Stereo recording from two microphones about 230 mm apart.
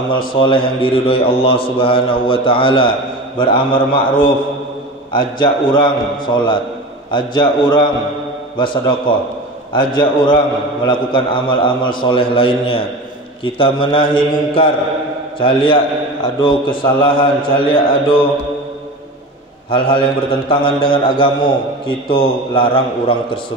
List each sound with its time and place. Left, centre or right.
0.4 s a man's voice: left
19.7 s a man's voice: left